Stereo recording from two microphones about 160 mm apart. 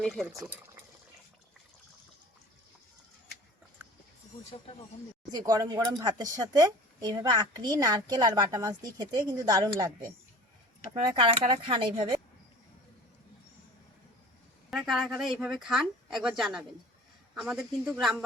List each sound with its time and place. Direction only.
0.0 s speech: centre (ahead or behind)
5.3 s speech: 20° right (ahead or behind)
10.9 s speech: 30° right (ahead or behind)
14.7 s speech: centre (ahead or behind)